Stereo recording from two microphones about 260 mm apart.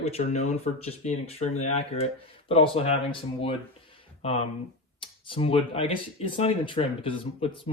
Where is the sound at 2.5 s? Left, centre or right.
Left.